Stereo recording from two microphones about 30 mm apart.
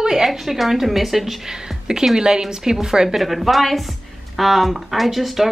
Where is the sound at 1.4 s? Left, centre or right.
Centre.